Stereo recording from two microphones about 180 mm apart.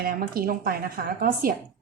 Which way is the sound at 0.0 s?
55° right (ahead or behind).